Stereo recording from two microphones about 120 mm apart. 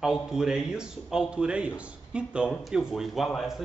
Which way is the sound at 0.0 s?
5° right (ahead or behind).